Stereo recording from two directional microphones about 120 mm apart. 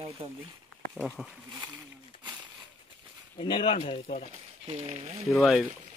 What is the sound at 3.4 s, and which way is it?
Speech, 45° left (ahead or behind).